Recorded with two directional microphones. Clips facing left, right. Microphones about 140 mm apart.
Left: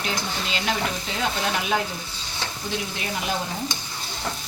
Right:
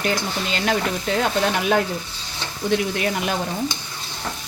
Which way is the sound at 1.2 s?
55° right (ahead or behind).